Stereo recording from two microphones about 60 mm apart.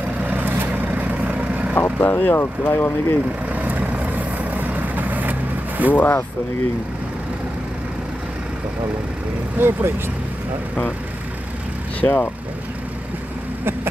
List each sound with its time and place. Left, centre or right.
0.2 s vehicle: right
2.0 s speech: left
3.5 s vehicle: right
5.9 s speech: left
9.6 s speech: right
12.0 s speech: left